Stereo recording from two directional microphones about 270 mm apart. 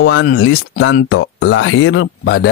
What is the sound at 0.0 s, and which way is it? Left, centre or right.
Speech, left.